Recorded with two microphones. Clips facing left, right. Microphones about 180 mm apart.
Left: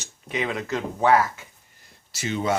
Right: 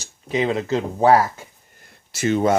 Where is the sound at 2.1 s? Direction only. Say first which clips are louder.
Right 7 dB; 50° right (ahead or behind).